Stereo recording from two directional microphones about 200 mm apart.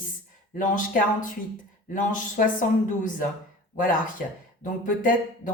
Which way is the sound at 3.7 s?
40° left (ahead or behind).